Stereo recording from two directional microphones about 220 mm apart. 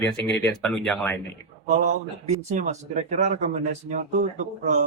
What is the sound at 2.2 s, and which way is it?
Speech, 30° right (ahead or behind).